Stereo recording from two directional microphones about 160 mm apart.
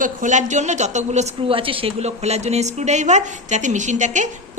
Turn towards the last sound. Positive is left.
turn(degrees=-50)  # may be behind; listen again after turning